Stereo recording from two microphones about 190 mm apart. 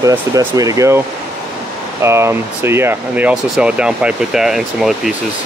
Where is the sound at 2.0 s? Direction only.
15° right (ahead or behind).